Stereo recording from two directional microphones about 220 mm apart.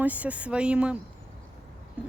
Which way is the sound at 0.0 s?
5° right (ahead or behind).